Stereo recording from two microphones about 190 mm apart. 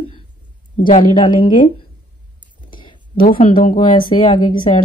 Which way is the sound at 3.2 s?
50° left (ahead or behind).